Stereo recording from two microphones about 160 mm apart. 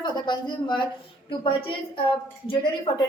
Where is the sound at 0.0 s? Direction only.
30° left (ahead or behind).